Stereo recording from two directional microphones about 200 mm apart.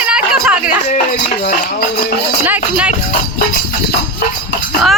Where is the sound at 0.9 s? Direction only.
40° left (ahead or behind).